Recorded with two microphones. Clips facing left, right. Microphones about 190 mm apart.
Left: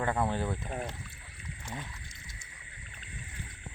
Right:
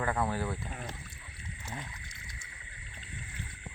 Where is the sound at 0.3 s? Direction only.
20° left (ahead or behind).